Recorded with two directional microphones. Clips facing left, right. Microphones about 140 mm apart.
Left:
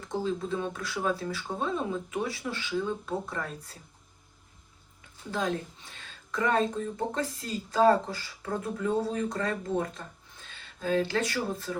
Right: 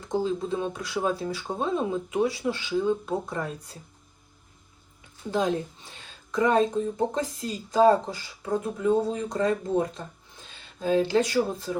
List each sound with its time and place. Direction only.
0.2 s speech: 25° right (ahead or behind)
5.3 s speech: 20° right (ahead or behind)